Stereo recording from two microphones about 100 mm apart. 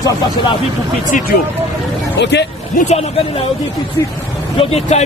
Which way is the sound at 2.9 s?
90° left.